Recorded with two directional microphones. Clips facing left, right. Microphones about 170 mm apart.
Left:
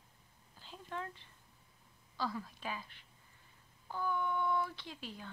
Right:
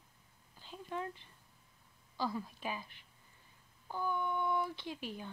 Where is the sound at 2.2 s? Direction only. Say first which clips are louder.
Right 2 dB; 15° right (ahead or behind).